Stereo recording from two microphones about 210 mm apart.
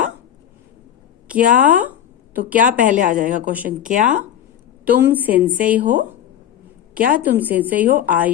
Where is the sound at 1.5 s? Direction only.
40° right (ahead or behind).